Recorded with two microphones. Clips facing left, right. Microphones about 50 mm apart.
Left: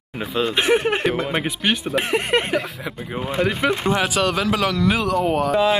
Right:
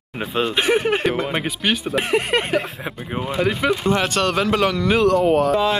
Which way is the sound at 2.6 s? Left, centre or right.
Right.